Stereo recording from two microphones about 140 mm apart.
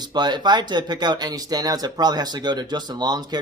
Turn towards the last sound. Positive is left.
turn(degrees=-30)  # may be behind; listen again after turning